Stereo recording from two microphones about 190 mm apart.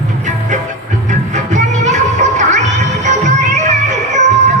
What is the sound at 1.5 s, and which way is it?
Music, 40° right (ahead or behind).